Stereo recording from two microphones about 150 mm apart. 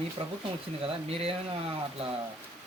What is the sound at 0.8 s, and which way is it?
Speech, 40° right (ahead or behind).